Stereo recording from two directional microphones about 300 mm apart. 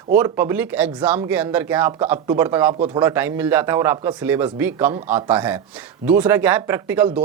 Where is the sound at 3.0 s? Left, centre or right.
Centre.